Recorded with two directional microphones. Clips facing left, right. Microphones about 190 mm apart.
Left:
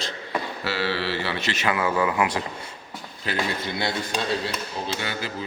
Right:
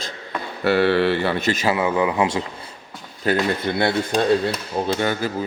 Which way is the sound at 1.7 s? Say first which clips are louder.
Right 2 dB; 20° right (ahead or behind).